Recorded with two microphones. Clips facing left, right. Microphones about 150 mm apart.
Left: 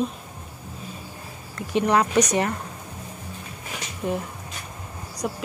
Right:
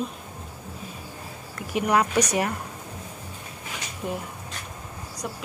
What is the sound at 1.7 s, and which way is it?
Speech, 10° right (ahead or behind).